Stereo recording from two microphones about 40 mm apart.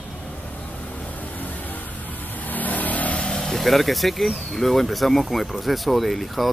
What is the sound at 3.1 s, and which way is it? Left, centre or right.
Speech, centre.